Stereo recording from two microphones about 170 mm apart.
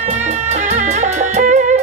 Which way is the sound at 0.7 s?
45° right (ahead or behind).